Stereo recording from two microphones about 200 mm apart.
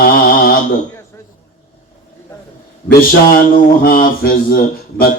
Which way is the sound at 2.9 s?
45° left (ahead or behind).